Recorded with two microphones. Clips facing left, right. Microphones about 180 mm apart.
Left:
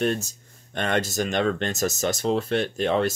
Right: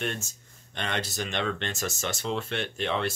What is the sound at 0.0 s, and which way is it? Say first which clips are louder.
Speech: left 9 dB; 40° left (ahead or behind).